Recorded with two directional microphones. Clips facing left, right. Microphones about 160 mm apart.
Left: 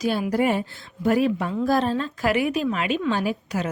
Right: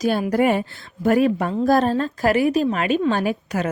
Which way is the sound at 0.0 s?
45° right (ahead or behind).